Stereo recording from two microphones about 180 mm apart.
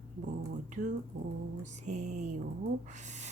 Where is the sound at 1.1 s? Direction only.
50° right (ahead or behind).